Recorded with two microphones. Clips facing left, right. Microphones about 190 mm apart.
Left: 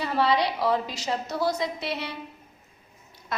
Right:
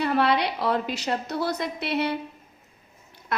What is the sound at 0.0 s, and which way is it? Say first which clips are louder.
A woman's voice: right 1 dB; 60° right (ahead or behind).